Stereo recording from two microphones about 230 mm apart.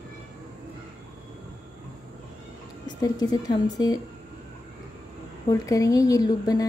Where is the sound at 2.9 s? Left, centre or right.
Centre.